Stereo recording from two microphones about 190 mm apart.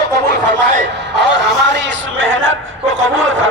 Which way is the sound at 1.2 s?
70° right (ahead or behind).